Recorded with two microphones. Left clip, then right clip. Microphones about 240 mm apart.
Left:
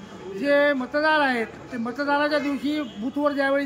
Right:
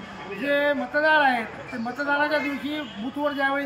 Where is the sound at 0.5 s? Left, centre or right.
Centre.